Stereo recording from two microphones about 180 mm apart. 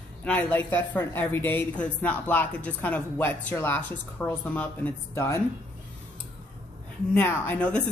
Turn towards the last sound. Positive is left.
turn(degrees=5)  # may be behind; listen again after turning